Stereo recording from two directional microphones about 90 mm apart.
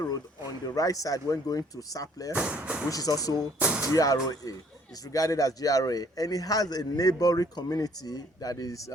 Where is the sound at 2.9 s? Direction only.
40° left (ahead or behind).